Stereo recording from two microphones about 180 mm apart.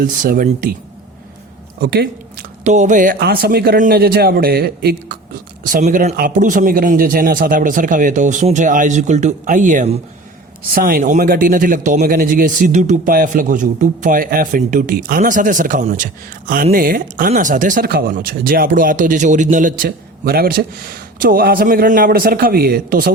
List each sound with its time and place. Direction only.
0.0 s a man's voice: 50° right (ahead or behind)
1.8 s speech: 60° right (ahead or behind)
2.6 s a man's voice: 40° right (ahead or behind)
3.2 s a man's voice: 60° right (ahead or behind); by 10.0 s 40° right (ahead or behind)
10.8 s a man's voice: 50° right (ahead or behind)